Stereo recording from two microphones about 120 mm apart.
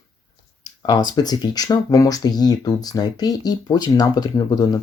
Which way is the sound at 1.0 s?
35° left (ahead or behind).